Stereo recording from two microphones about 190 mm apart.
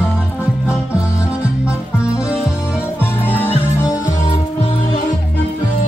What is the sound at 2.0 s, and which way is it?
Music, 5° right (ahead or behind).